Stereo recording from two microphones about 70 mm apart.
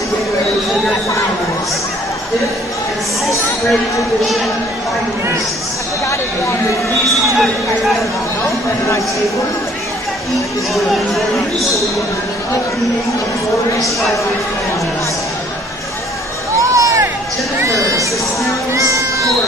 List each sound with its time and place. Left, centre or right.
7.1 s speech: centre
10.7 s speech: centre
16.5 s a sound: right
18.7 s music: right